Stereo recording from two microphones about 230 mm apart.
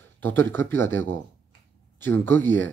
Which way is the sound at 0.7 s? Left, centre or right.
Centre.